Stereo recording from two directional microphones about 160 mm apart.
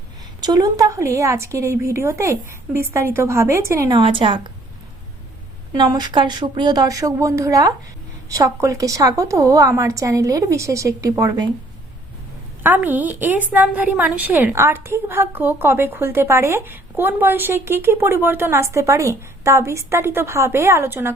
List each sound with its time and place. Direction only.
0.4 s a woman's voice: 25° right (ahead or behind)
5.7 s a woman's voice: 25° right (ahead or behind)
12.6 s a woman's voice: 10° right (ahead or behind)